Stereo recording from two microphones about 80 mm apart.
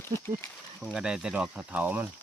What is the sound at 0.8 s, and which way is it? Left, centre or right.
Speech, centre.